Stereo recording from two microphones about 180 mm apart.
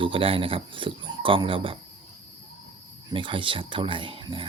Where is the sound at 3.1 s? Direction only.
30° right (ahead or behind).